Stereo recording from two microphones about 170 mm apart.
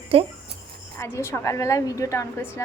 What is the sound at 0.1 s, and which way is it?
Speech, 35° right (ahead or behind).